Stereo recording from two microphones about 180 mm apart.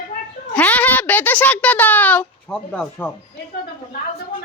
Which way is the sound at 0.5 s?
10° left (ahead or behind).